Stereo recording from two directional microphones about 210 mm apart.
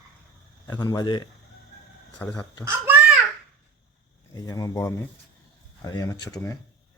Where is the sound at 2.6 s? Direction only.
10° right (ahead or behind).